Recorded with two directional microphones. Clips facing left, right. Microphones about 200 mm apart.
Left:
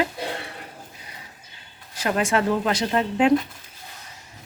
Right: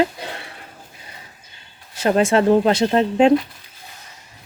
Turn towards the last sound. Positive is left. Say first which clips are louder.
# right 6 dB
turn(degrees=-30)  # may be behind; listen again after turning